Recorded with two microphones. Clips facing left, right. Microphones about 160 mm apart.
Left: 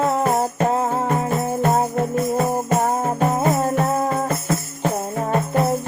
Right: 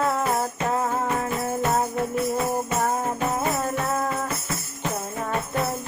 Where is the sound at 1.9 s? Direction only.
45° left (ahead or behind).